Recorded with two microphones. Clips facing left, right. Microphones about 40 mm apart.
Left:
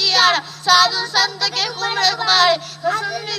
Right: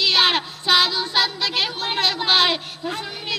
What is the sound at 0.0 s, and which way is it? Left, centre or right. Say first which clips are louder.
Child singing: left 3 dB; right.